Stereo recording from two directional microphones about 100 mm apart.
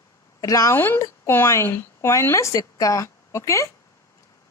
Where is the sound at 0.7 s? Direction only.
20° left (ahead or behind).